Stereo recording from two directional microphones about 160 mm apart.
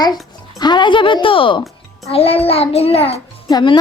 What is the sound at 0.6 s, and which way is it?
A child's voice, 30° left (ahead or behind).